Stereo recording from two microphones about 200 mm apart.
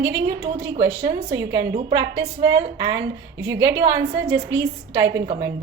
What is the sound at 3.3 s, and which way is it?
Speech, 65° right (ahead or behind).